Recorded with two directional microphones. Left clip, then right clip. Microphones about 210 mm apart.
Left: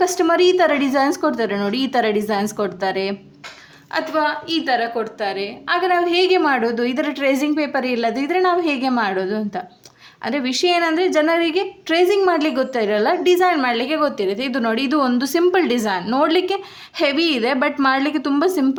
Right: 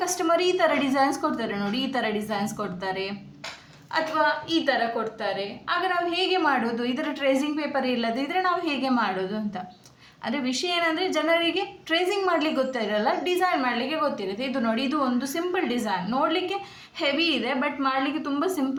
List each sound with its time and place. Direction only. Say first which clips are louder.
0.0 s a woman's voice: left 8 dB; 35° left (ahead or behind)